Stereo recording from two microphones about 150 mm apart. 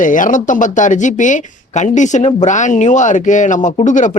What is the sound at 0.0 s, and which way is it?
Speech, 60° left (ahead or behind).